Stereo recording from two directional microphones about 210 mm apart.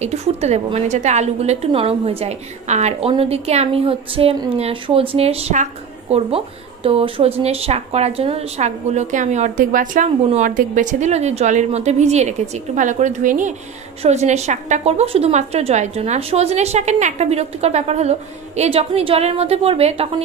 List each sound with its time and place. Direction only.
0.0 s a woman's voice: 30° right (ahead or behind)